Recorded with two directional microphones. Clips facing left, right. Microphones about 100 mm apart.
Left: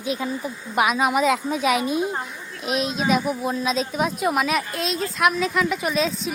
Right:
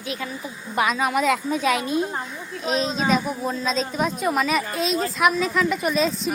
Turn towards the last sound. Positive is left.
turn(degrees=0)  # may be behind; listen again after turning